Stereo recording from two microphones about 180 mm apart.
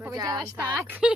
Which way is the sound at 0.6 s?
5° right (ahead or behind).